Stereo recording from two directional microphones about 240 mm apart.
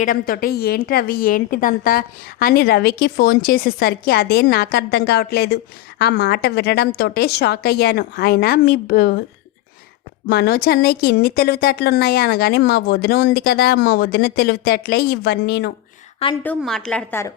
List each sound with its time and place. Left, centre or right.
0.0 s a woman's voice: left
10.2 s a woman's voice: left
16.2 s a woman's voice: left
16.6 s a woman's voice: centre